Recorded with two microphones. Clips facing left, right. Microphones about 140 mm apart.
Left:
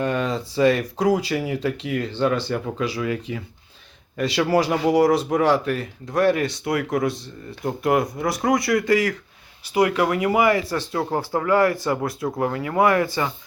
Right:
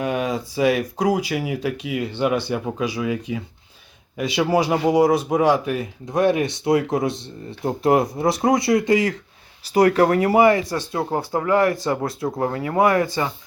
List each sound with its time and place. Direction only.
0.0 s speech: 10° right (ahead or behind)
9.7 s speech: 40° right (ahead or behind)
10.6 s speech: 15° right (ahead or behind)